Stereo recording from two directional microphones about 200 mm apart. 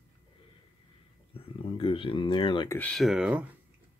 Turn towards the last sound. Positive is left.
turn(degrees=-5)  # may be behind; listen again after turning